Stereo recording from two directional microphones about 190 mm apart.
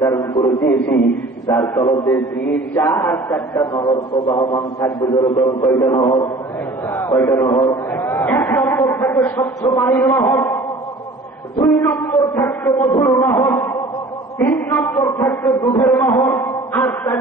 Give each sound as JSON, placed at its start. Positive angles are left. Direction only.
{"t": 0.0, "sound": "a man's voice", "side_deg": 15}
{"t": 0.7, "sound": "a man's voice", "side_deg": 65}
{"t": 1.5, "sound": "a man's voice", "side_deg": 15}
{"t": 11.6, "sound": "a sound", "side_deg": 10}
{"t": 14.4, "sound": "a man's voice", "side_deg": 10}